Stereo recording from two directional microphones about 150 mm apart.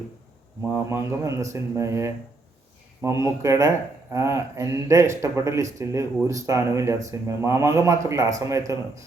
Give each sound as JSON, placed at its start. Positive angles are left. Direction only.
{"t": 0.9, "sound": "a man's voice", "side_deg": -20}